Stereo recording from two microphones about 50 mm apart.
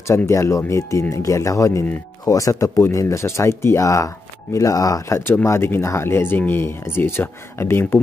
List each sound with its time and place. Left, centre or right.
0.0 s speech: left
5.4 s speech: left
6.3 s speech: left